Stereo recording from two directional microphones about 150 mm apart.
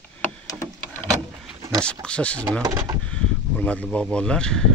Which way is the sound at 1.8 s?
5° left (ahead or behind).